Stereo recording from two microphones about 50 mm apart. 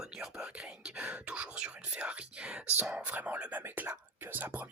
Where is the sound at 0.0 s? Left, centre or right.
Centre.